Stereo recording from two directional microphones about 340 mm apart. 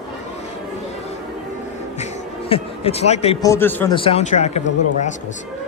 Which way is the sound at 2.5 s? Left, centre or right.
Centre.